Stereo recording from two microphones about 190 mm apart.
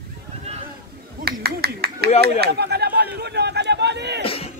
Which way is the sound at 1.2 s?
55° right (ahead or behind).